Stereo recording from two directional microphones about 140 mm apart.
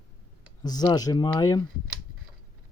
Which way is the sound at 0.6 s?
30° left (ahead or behind).